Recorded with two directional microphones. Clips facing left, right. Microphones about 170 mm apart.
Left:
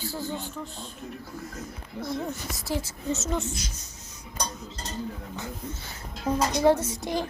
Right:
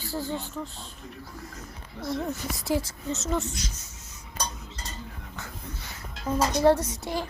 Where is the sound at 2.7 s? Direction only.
15° right (ahead or behind).